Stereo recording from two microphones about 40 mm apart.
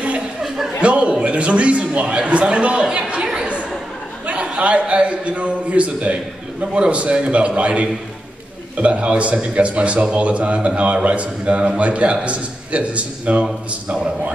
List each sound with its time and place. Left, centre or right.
0.8 s a sound: right
1.2 s a man's voice: right
4.3 s a man's voice: right